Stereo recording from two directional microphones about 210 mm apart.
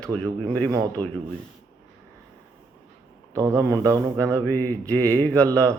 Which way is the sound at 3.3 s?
15° right (ahead or behind).